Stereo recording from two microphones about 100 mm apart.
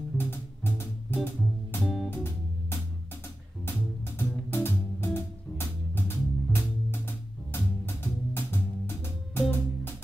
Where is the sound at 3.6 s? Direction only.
25° left (ahead or behind).